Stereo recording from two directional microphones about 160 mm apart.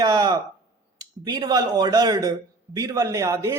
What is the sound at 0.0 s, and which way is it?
A man's voice, 25° right (ahead or behind).